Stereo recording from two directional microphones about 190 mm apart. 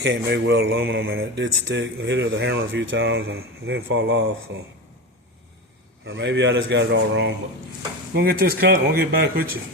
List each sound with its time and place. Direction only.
0.0 s speech: 65° right (ahead or behind); by 1.0 s 85° right
1.0 s speech: 55° right (ahead or behind)
1.5 s speech: 75° right (ahead or behind)
4.5 s speech: 70° right (ahead or behind)
6.1 s speech: 70° right (ahead or behind)
8.1 s speech: 50° right (ahead or behind)